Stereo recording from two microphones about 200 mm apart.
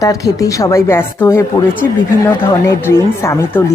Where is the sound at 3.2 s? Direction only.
15° left (ahead or behind).